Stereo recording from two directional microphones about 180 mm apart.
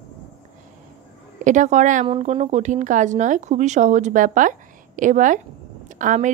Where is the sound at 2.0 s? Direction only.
35° right (ahead or behind).